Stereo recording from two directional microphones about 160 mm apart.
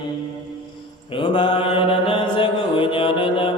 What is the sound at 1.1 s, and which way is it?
Mantra, 30° left (ahead or behind).